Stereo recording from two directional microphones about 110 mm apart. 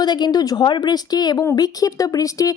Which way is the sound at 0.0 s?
40° left (ahead or behind).